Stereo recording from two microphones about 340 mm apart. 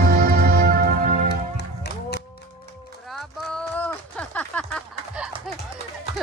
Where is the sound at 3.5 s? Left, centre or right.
Centre.